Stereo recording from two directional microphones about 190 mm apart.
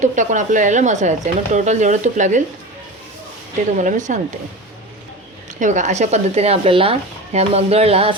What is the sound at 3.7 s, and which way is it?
Speech, 40° right (ahead or behind).